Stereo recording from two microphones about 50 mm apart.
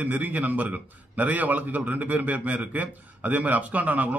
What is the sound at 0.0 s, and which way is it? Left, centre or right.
A man's voice, right.